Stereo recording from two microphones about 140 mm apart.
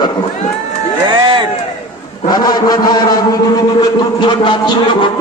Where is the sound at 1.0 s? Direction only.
35° right (ahead or behind).